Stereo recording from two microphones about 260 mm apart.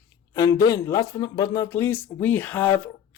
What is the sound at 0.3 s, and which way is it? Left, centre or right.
A man's voice, centre.